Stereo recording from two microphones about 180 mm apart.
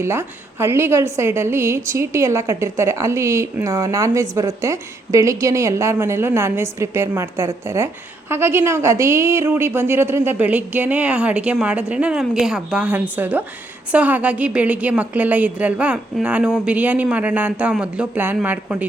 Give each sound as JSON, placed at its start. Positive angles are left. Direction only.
{"t": 0.0, "sound": "a woman's voice", "side_deg": -15}